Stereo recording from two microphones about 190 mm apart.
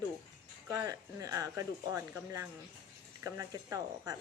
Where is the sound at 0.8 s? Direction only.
20° right (ahead or behind).